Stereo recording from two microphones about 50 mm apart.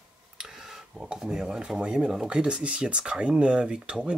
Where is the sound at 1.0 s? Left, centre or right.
Centre.